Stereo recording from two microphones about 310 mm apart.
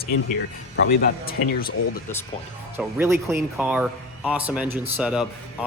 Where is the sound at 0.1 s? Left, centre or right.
Left.